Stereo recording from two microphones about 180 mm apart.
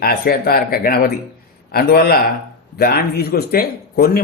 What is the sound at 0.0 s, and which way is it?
Speech, 60° left (ahead or behind).